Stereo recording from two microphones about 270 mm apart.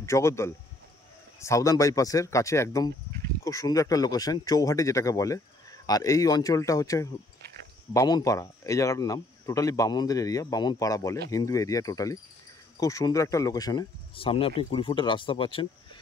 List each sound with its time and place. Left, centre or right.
0.0 s speech: centre